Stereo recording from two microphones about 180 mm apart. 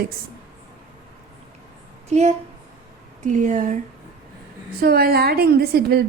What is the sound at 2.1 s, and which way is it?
A woman's voice, 40° right (ahead or behind).